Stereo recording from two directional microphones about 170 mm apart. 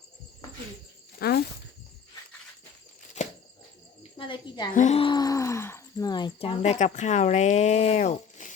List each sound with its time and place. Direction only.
1.2 s a sound: 70° left (ahead or behind)
3.2 s bird flight: 45° left (ahead or behind)
4.2 s a woman's voice: 25° left (ahead or behind)
4.7 s a woman's voice: 50° left (ahead or behind)
4.9 s speech: 25° left (ahead or behind); by 8.5 s 45° left (ahead or behind)